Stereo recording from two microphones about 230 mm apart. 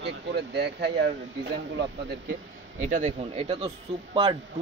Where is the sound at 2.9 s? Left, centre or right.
Right.